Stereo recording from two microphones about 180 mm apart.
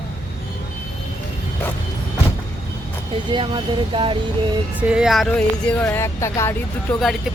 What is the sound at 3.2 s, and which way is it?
Speech, 25° right (ahead or behind).